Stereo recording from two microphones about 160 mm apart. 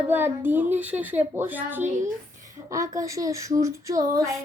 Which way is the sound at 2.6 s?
20° right (ahead or behind).